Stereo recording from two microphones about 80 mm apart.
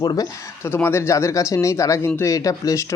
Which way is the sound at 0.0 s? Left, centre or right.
Left.